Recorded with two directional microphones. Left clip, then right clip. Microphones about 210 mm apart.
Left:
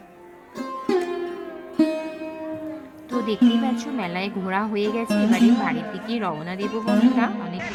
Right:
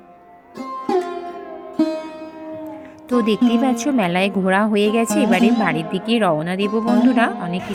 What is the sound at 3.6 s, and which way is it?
A woman's voice, 25° right (ahead or behind).